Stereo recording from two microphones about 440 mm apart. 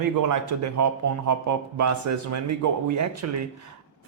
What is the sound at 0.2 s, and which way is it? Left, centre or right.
Speech, right.